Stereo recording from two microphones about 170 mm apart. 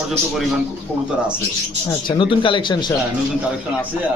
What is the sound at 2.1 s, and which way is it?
Speech, 30° left (ahead or behind).